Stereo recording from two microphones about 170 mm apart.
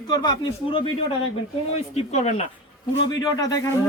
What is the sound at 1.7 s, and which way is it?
Speech, 40° left (ahead or behind).